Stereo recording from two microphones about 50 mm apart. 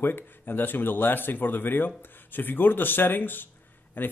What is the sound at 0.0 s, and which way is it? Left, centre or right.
Speech, left.